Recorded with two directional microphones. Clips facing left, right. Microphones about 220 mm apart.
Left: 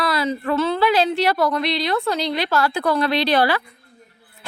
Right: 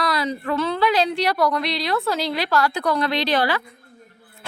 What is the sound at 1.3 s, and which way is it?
Speech, 25° left (ahead or behind).